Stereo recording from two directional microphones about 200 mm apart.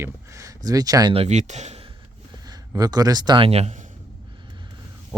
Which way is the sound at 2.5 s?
20° right (ahead or behind).